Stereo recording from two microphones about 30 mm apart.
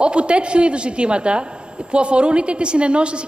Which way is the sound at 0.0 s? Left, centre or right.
Right.